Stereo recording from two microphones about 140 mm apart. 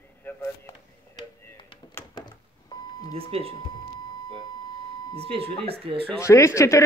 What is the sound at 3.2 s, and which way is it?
Speech, 45° right (ahead or behind).